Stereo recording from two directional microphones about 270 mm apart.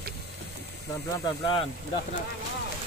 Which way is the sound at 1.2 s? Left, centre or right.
Centre.